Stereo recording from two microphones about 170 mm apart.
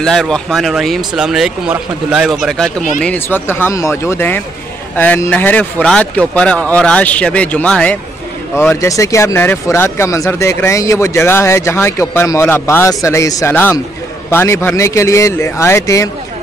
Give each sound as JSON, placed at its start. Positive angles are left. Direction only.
{"t": 0.0, "sound": "speech", "side_deg": 5}
{"t": 3.0, "sound": "speech", "side_deg": 10}
{"t": 8.5, "sound": "speech", "side_deg": 15}